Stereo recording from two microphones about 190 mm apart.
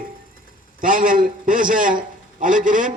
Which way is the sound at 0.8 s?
45° right (ahead or behind).